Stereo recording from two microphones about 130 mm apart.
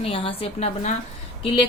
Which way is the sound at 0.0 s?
45° left (ahead or behind).